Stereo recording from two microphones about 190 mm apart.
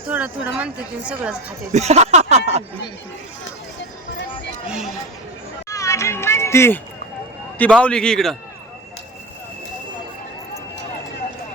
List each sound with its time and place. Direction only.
0.1 s speech: 5° right (ahead or behind)
1.7 s speech: 35° right (ahead or behind)
4.6 s a man's voice: 5° right (ahead or behind)
5.6 s a sound: 15° left (ahead or behind)
7.6 s a man's voice: 5° left (ahead or behind)